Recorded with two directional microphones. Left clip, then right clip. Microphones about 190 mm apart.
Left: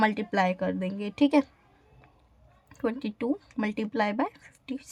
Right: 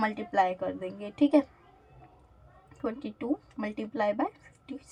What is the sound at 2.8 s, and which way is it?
A woman's voice, 60° left (ahead or behind).